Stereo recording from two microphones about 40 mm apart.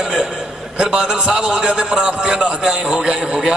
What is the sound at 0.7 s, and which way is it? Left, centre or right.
A man's voice, centre.